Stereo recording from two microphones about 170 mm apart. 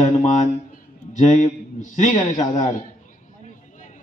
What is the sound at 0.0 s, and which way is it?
Speech, 40° left (ahead or behind).